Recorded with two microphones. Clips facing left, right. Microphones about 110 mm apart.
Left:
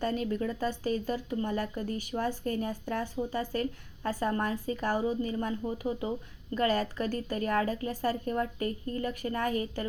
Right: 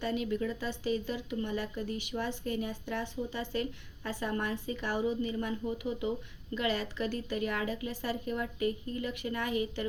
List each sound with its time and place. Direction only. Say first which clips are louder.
0.0 s speech: left 2 dB; 40° left (ahead or behind)